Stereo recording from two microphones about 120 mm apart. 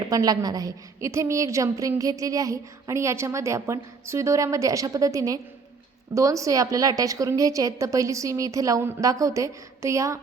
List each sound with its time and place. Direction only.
0.0 s a woman's voice: 30° right (ahead or behind)